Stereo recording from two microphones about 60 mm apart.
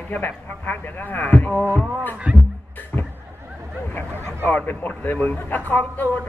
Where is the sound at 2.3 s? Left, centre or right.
Centre.